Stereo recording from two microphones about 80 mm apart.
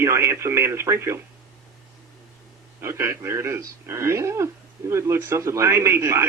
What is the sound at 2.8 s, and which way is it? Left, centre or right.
A man's voice, right.